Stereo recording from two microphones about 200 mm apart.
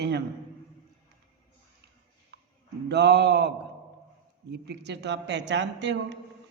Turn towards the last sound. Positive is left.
turn(degrees=-60)  # may be behind; listen again after turning